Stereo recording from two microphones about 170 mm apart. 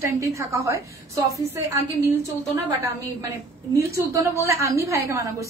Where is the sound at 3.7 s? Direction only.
15° right (ahead or behind).